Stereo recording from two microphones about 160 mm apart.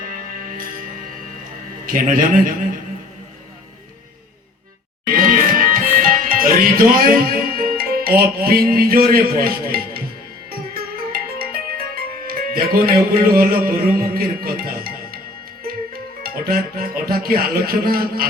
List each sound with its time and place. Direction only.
0.0 s music: 60° right (ahead or behind)
1.9 s a man's voice: 60° right (ahead or behind)
5.0 s music: 60° right (ahead or behind)
11.1 s music: 70° right (ahead or behind)
15.6 s speech: 65° right (ahead or behind)